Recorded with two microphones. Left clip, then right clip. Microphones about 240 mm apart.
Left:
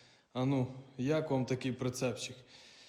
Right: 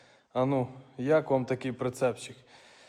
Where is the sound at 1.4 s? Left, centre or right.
Centre.